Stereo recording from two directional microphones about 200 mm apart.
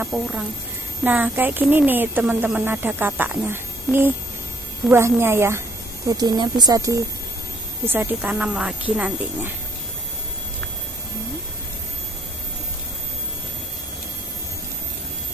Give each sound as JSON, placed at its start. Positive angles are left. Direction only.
{"t": 0.0, "sound": "speech", "side_deg": -5}